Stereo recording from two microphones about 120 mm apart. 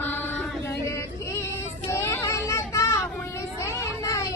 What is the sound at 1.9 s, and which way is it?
Child singing, 25° left (ahead or behind).